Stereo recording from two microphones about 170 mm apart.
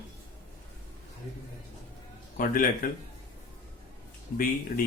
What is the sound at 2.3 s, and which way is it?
Speech, 55° left (ahead or behind).